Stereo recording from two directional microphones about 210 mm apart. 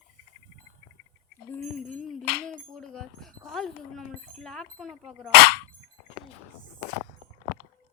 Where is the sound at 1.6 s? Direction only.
5° left (ahead or behind).